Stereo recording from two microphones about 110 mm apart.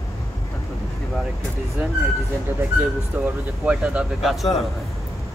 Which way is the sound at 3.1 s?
20° right (ahead or behind).